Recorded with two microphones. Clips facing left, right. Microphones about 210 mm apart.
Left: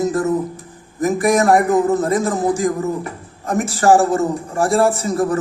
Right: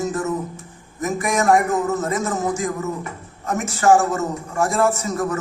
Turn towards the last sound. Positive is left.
turn(degrees=35)  # may be behind; listen again after turning